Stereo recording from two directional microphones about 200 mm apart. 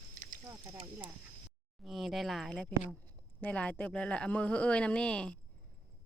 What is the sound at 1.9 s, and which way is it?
Speech, centre (ahead or behind).